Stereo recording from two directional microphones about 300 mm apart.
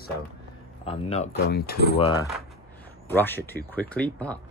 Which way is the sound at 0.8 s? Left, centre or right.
Centre.